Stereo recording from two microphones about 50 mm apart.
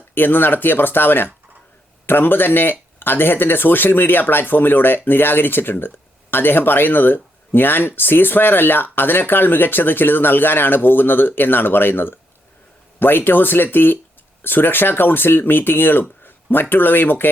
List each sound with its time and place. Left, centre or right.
0.1 s speech: left